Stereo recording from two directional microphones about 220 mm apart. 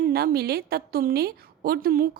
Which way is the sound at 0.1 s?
45° right (ahead or behind).